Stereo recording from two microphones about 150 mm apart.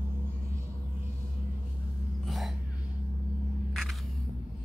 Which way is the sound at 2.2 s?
Centre (ahead or behind).